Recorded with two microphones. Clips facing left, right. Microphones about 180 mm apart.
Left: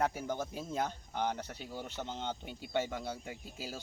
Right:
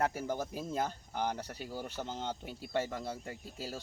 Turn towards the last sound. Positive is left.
turn(degrees=0)  # may be behind; listen again after turning